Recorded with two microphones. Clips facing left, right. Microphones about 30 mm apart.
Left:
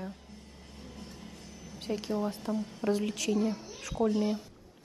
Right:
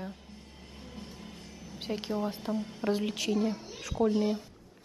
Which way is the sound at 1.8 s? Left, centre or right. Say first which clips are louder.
Even; right.